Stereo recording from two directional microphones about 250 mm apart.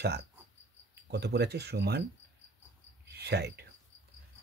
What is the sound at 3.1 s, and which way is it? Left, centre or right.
Speech, right.